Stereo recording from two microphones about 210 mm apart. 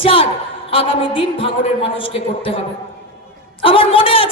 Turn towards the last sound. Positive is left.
turn(degrees=25)  # may be behind; listen again after turning